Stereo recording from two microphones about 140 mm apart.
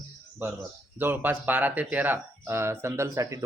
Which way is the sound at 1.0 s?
15° right (ahead or behind).